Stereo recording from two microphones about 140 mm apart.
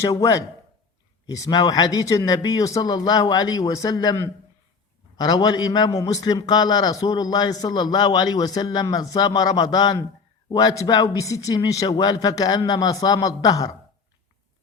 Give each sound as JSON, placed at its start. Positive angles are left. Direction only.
{"t": 0.0, "sound": "a man's voice", "side_deg": 25}